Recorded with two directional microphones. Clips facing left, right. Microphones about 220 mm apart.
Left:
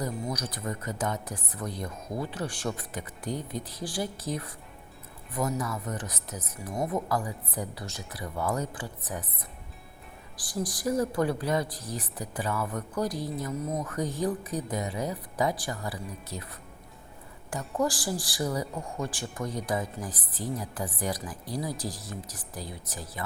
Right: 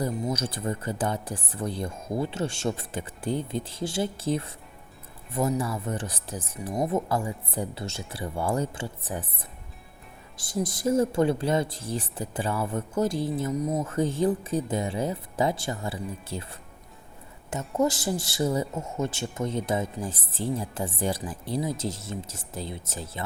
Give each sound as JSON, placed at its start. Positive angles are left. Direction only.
{"t": 0.0, "sound": "speech", "side_deg": -25}